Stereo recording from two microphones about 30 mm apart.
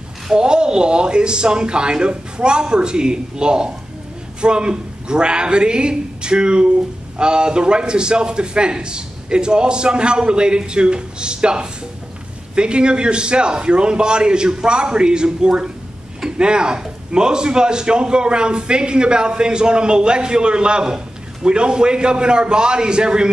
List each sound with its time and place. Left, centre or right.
0.3 s speech: right